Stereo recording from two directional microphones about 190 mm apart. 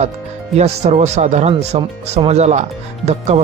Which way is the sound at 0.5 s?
35° right (ahead or behind).